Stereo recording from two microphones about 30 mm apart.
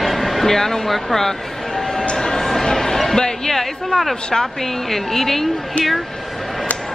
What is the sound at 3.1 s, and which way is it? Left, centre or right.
Music, left.